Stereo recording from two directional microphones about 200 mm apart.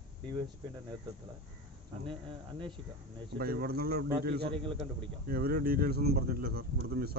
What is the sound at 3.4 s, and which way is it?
Speech, 50° right (ahead or behind).